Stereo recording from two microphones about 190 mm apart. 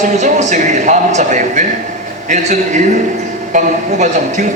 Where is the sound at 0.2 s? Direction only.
40° right (ahead or behind).